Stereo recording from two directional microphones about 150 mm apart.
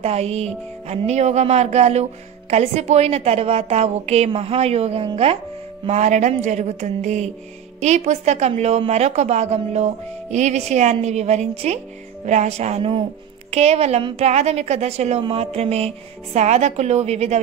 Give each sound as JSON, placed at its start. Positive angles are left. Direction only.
{"t": 0.0, "sound": "a woman's voice", "side_deg": -45}
{"t": 5.9, "sound": "a woman's voice", "side_deg": -50}